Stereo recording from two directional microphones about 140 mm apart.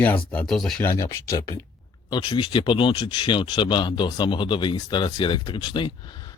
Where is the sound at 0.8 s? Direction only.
20° left (ahead or behind).